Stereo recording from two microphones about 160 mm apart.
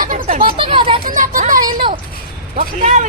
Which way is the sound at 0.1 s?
55° right (ahead or behind).